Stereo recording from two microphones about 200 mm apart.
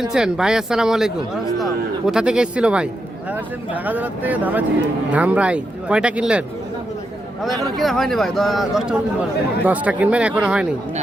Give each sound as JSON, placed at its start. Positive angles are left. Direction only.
{"t": 0.0, "sound": "speech", "side_deg": -5}
{"t": 7.4, "sound": "speech", "side_deg": 0}